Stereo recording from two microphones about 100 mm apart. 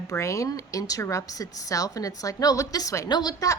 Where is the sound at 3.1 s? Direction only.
45° left (ahead or behind).